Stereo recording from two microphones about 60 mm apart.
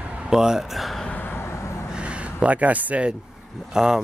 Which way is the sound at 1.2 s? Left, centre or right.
Left.